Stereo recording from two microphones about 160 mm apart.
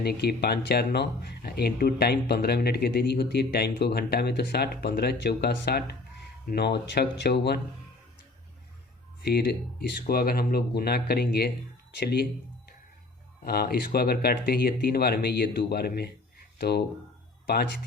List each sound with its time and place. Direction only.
0.0 s speech: 85° left
9.2 s speech: 85° left
13.4 s speech: 75° left (ahead or behind)